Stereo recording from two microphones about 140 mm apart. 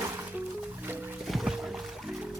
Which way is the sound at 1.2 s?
Centre (ahead or behind).